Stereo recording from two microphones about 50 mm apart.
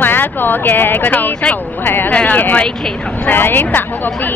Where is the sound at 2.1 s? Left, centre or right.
Left.